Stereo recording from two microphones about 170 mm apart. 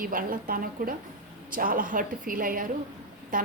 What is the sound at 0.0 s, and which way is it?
A woman's voice, 55° right (ahead or behind).